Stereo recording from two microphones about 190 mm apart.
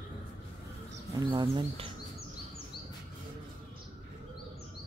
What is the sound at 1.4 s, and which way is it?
Speech, 25° right (ahead or behind).